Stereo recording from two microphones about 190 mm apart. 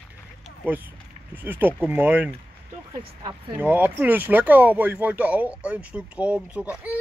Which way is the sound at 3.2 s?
20° right (ahead or behind).